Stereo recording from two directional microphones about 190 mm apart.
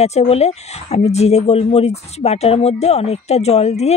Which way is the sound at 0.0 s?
35° left (ahead or behind).